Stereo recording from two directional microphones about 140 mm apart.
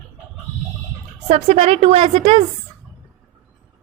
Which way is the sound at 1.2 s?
50° right (ahead or behind).